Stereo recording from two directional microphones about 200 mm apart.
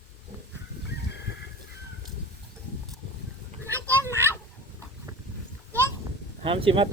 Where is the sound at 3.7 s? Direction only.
10° left (ahead or behind).